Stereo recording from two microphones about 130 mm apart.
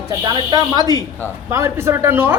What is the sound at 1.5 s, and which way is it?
Speech, 20° right (ahead or behind).